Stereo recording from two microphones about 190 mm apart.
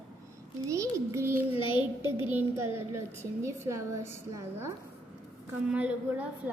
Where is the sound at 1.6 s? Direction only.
25° left (ahead or behind).